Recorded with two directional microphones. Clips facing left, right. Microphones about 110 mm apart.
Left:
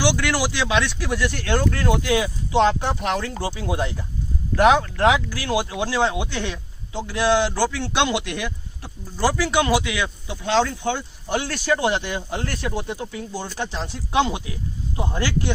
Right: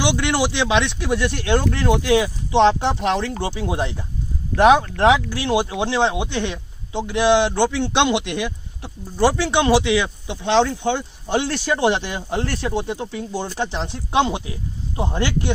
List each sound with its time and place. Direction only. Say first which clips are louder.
0.0 s speech: right 2 dB; 25° right (ahead or behind)